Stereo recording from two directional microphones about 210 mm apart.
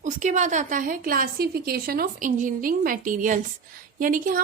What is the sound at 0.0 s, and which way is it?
A woman's voice, 35° right (ahead or behind).